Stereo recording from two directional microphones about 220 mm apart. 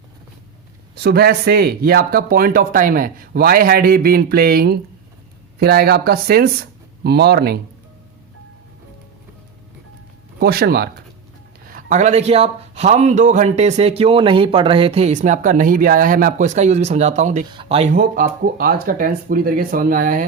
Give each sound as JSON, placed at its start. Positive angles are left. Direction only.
{"t": 0.9, "sound": "speech", "side_deg": -45}
{"t": 10.4, "sound": "speech", "side_deg": -45}
{"t": 11.7, "sound": "speech", "side_deg": -35}